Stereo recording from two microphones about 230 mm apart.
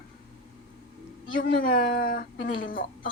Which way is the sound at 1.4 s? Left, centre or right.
Left.